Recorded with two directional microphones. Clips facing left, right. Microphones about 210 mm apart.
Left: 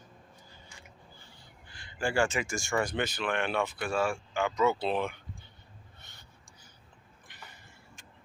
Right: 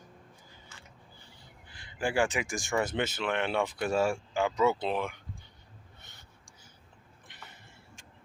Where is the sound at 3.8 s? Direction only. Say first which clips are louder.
Right 2 dB; 40° right (ahead or behind).